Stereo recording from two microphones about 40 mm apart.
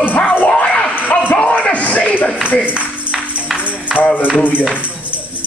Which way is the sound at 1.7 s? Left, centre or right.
Left.